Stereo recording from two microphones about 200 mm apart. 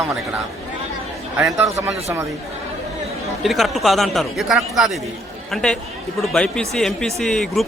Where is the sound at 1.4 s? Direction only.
10° right (ahead or behind).